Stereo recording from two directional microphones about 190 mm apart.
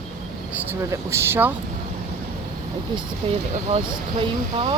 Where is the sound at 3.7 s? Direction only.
30° right (ahead or behind).